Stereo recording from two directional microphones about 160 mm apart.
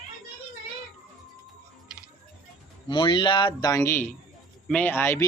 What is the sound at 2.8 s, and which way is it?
Speech, 30° left (ahead or behind).